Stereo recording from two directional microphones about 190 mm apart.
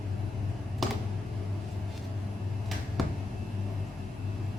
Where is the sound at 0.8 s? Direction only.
Centre (ahead or behind).